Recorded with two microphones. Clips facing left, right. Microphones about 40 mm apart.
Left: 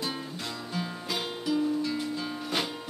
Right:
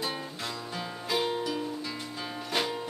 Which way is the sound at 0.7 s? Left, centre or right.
Centre.